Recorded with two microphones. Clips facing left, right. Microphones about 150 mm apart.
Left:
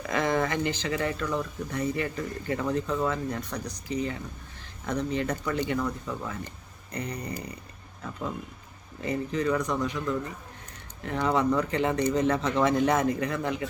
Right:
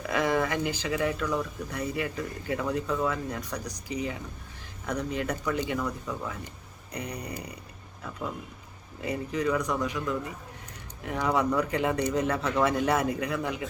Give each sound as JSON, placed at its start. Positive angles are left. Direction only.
{"t": 0.1, "sound": "speech", "side_deg": -10}
{"t": 6.9, "sound": "speech", "side_deg": -15}
{"t": 9.0, "sound": "speech", "side_deg": -10}